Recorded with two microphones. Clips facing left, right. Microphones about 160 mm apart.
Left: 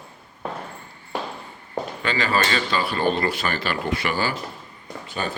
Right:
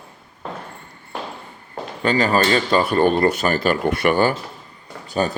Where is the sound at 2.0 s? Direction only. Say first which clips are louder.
Right 6 dB; 40° right (ahead or behind).